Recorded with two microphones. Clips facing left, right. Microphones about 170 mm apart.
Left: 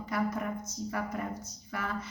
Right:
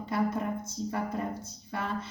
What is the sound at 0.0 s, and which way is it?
Speech, 30° right (ahead or behind).